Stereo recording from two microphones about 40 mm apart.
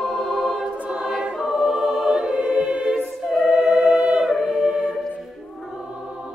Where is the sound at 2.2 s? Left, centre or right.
Right.